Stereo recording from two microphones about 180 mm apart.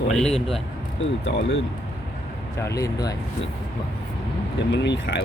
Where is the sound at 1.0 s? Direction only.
90° left.